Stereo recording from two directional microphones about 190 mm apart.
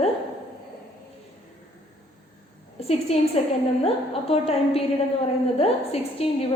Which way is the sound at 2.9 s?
30° left (ahead or behind).